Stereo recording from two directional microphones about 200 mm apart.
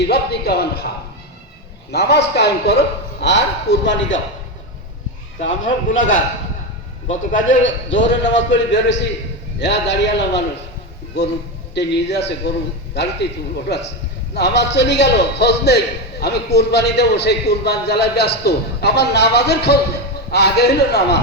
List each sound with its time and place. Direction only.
0.0 s speech: 55° left (ahead or behind)
1.9 s a man's voice: 55° left (ahead or behind)
5.4 s a man's voice: 70° left (ahead or behind)
7.4 s a man's voice: 70° left (ahead or behind)
11.7 s a man's voice: 60° left (ahead or behind)
14.3 s a man's voice: 60° left (ahead or behind)